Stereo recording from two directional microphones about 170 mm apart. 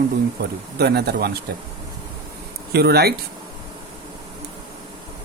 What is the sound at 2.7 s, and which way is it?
Speech, 70° right (ahead or behind).